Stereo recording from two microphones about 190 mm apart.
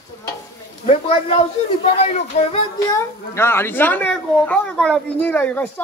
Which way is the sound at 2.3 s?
35° left (ahead or behind).